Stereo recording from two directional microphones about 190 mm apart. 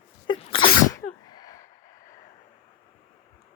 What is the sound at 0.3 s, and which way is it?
Sneeze, 25° left (ahead or behind).